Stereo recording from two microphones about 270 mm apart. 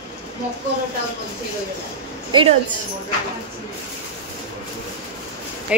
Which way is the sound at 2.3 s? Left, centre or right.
Centre.